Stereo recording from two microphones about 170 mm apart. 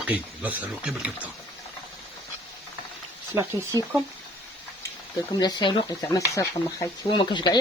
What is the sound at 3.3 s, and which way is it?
Speech, 15° right (ahead or behind).